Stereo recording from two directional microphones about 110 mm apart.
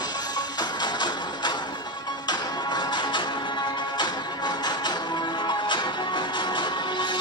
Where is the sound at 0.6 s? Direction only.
40° left (ahead or behind).